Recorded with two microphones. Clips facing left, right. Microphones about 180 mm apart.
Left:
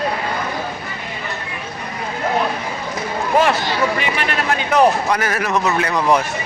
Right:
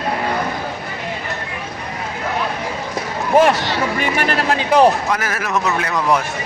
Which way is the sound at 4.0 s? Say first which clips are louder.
Right 2 dB; 45° right (ahead or behind).